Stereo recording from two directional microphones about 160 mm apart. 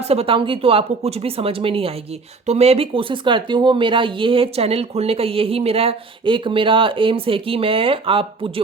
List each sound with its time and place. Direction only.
0.0 s speech: 40° right (ahead or behind)